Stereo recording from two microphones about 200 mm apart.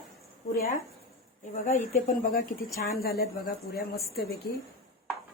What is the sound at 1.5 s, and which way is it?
A woman's voice, 40° left (ahead or behind).